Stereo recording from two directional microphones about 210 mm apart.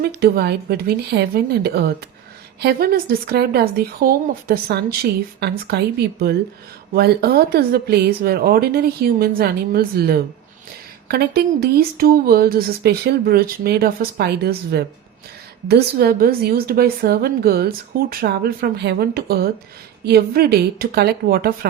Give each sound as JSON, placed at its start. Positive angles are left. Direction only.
{"t": 0.0, "sound": "a woman's voice", "side_deg": -50}